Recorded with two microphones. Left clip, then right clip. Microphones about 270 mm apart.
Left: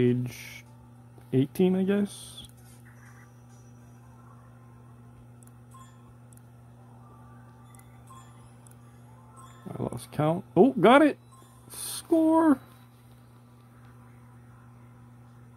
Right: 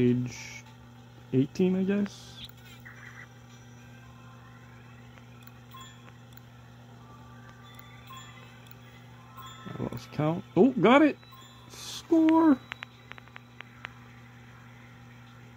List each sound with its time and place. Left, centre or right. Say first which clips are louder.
0.0 s speech: left 1 dB; centre
9.8 s speech: left 3 dB; centre
11.7 s a sound: even; centre